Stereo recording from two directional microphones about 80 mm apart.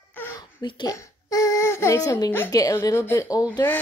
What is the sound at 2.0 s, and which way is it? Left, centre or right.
Speech, left.